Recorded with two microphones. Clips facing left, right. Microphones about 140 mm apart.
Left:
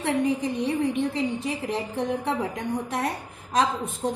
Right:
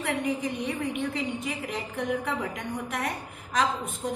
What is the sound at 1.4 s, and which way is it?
A woman's voice, 30° left (ahead or behind).